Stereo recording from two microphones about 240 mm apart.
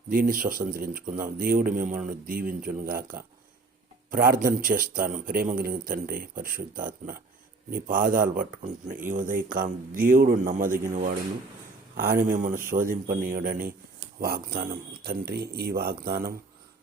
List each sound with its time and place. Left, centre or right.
0.1 s speech: right